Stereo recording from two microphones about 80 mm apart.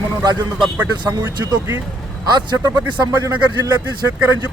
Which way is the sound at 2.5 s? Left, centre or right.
Right.